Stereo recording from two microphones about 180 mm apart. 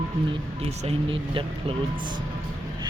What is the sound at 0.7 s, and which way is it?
Speech, 35° right (ahead or behind).